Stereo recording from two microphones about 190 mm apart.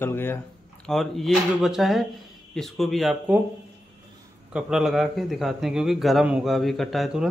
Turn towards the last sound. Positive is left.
turn(degrees=0)  # may be behind; listen again after turning